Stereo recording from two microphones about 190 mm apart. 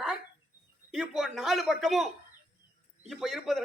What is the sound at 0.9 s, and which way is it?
A man's voice, centre (ahead or behind).